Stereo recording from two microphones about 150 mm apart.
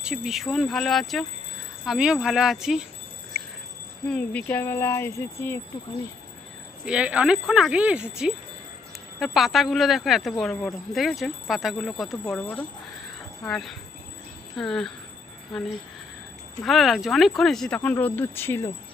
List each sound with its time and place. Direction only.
0.0 s speech: 5° right (ahead or behind)
4.0 s speech: 10° left (ahead or behind)
6.8 s speech: 5° right (ahead or behind)
16.6 s speech: centre (ahead or behind); by 18.7 s 15° left (ahead or behind)